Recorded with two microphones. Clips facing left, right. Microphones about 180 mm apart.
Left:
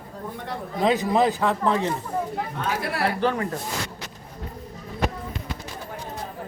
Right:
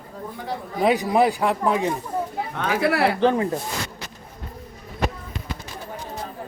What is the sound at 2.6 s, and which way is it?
Speech, 75° right (ahead or behind).